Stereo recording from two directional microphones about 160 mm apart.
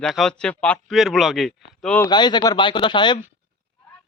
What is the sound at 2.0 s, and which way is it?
Speech, 25° left (ahead or behind).